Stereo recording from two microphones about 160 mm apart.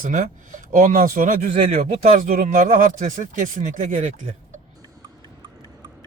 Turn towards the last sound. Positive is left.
turn(degrees=-25)  # may be behind; listen again after turning